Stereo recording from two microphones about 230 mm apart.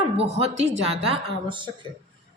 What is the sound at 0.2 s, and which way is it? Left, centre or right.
Speech, right.